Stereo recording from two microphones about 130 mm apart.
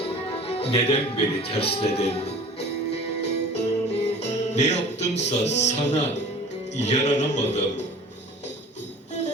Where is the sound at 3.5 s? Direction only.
55° left (ahead or behind).